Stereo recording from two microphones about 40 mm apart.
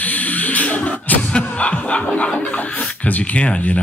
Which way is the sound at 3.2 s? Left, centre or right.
Left.